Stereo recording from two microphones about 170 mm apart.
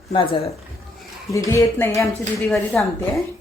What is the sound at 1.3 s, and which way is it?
A woman's voice, 20° left (ahead or behind).